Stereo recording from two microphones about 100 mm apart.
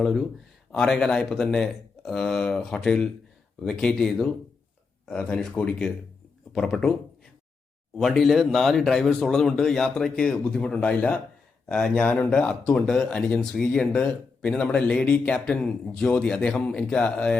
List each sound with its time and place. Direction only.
0.0 s speech: centre (ahead or behind)
7.9 s speech: centre (ahead or behind)